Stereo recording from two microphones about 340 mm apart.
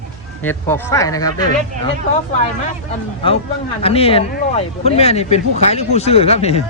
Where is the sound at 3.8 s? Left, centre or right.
Centre.